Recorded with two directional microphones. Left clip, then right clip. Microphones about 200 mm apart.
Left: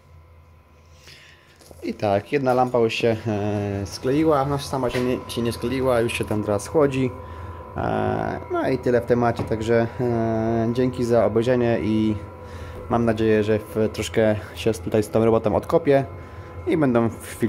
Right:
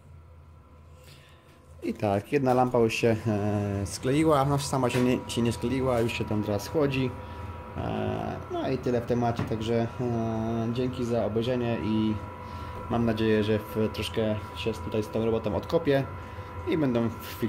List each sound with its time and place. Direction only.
1.8 s speech: centre (ahead or behind); by 12.2 s 25° left (ahead or behind)
12.9 s speech: 15° left (ahead or behind)